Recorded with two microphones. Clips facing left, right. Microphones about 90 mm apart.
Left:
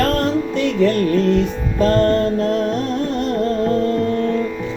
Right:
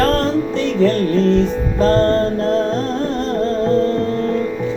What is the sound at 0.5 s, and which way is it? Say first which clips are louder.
Music: even; 30° right (ahead or behind).